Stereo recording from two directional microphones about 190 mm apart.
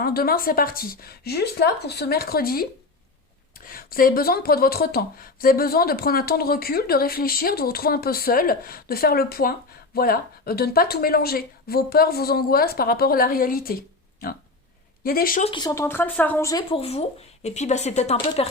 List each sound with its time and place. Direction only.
0.0 s speech: 50° left (ahead or behind)
15.4 s speech: 20° left (ahead or behind)